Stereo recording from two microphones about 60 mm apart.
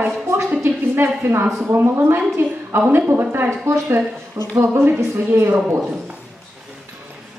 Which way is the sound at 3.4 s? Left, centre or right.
Right.